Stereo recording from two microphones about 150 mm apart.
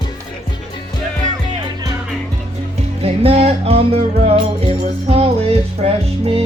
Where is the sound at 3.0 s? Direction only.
40° right (ahead or behind).